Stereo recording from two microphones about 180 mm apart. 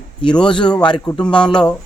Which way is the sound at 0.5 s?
5° left (ahead or behind).